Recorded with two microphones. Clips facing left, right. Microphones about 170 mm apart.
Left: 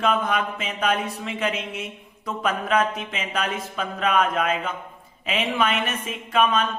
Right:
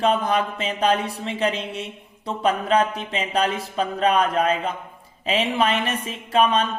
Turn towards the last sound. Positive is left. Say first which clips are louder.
# right 2 dB
turn(degrees=-35)  # may be behind; listen again after turning